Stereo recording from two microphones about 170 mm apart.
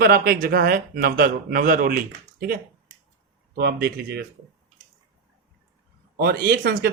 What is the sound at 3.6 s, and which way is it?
Speech, 70° right (ahead or behind).